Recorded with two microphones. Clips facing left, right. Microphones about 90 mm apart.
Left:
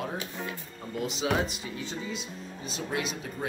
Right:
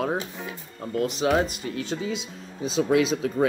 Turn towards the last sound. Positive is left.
turn(degrees=-90)